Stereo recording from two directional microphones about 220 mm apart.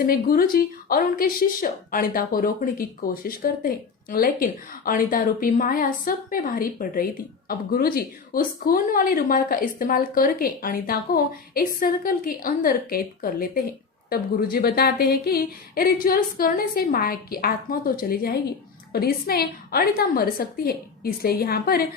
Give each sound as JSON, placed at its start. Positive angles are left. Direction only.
{"t": 0.0, "sound": "a woman's voice", "side_deg": 40}